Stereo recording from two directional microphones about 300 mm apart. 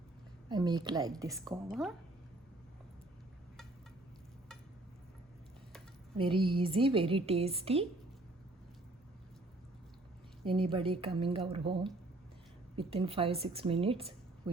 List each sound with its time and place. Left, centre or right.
0.4 s a woman's voice: centre
1.7 s speech: centre
6.1 s a woman's voice: centre
10.4 s a woman's voice: centre